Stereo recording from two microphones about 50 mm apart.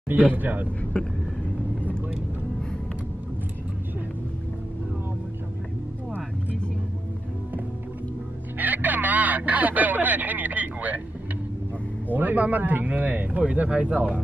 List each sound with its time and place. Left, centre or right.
0.3 s speech: right
1.0 s vehicle: left
8.5 s music: right
12.1 s speech: right